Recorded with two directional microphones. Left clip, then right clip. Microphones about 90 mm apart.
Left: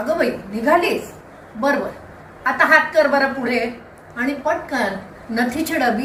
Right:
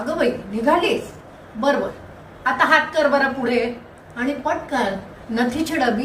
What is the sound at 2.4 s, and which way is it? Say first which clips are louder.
A woman's voice: left 2 dB; 15° left (ahead or behind).